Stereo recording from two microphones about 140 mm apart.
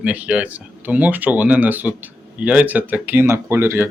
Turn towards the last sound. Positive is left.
turn(degrees=-15)  # may be behind; listen again after turning